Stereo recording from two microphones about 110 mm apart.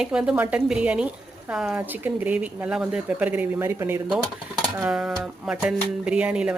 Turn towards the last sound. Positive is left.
turn(degrees=-10)  # may be behind; listen again after turning